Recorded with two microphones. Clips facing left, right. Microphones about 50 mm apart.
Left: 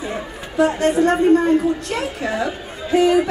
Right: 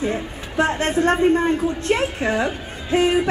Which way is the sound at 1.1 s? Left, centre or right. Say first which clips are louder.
Left 3 dB; right.